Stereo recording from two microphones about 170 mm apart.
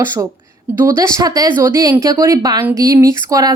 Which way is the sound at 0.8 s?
15° right (ahead or behind).